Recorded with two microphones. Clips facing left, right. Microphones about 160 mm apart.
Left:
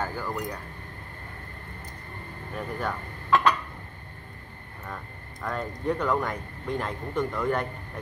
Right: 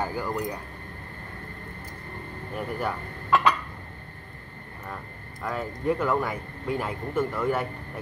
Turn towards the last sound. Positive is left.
turn(degrees=-5)  # may be behind; listen again after turning